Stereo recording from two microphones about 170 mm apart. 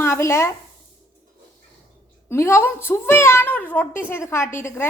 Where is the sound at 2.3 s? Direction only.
15° left (ahead or behind).